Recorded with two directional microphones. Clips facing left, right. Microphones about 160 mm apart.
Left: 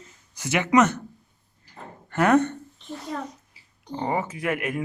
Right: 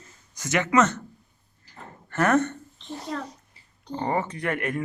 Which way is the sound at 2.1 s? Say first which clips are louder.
Left 2 dB; 15° left (ahead or behind).